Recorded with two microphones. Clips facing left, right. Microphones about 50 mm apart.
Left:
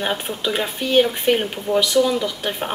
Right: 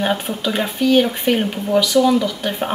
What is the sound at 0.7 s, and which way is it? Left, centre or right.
Speech, centre.